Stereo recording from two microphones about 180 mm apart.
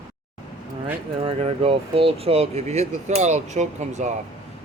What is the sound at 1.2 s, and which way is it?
Speech, 30° right (ahead or behind).